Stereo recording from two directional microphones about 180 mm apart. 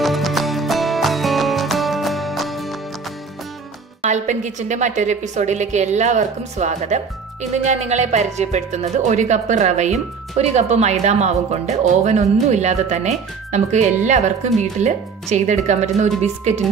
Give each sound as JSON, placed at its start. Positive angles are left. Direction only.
{"t": 0.0, "sound": "music", "side_deg": 0}
{"t": 4.1, "sound": "speech", "side_deg": -40}